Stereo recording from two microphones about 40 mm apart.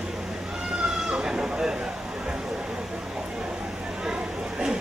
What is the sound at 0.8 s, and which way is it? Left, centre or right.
Speech, centre.